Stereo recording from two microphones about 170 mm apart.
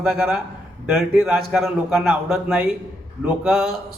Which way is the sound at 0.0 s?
5° right (ahead or behind).